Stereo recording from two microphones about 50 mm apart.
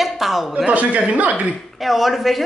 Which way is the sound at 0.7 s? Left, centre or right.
Right.